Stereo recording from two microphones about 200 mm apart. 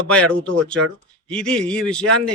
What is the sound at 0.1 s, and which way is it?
Speech, 5° left (ahead or behind).